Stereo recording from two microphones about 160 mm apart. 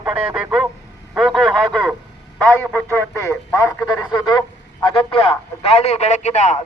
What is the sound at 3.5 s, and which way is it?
Speech, 20° left (ahead or behind).